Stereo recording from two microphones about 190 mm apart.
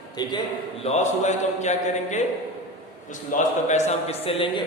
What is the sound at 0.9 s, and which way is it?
A man's voice, 35° left (ahead or behind).